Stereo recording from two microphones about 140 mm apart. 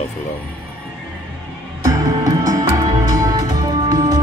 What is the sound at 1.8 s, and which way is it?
Music, 25° right (ahead or behind).